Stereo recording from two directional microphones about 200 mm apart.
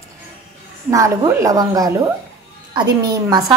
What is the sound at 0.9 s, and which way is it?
A woman's voice, 15° right (ahead or behind).